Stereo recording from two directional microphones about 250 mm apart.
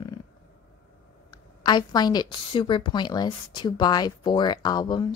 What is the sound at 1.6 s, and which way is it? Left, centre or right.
A woman's voice, centre.